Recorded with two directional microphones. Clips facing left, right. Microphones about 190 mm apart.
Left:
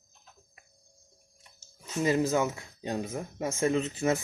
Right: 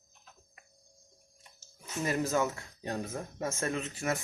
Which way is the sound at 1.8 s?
20° left (ahead or behind).